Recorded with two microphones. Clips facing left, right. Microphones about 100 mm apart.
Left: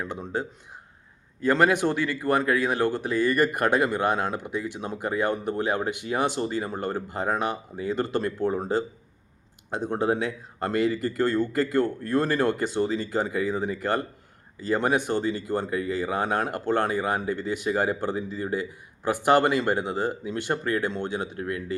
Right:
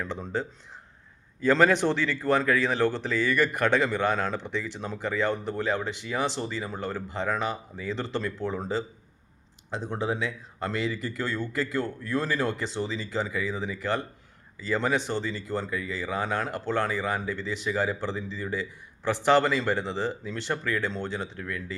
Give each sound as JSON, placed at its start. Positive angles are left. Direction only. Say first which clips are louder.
{"t": 0.0, "sound": "speech", "louder": "left 1 dB", "side_deg": 10}
{"t": 1.5, "sound": "speech", "louder": "even", "side_deg": 10}
{"t": 3.2, "sound": "speech", "louder": "left 3 dB", "side_deg": 45}